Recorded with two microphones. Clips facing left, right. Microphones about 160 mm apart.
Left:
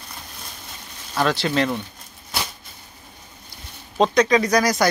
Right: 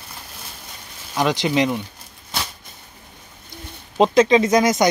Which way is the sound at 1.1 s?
15° right (ahead or behind).